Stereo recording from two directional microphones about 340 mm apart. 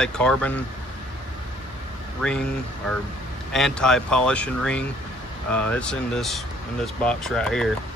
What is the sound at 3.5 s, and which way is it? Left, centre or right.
Speech, centre.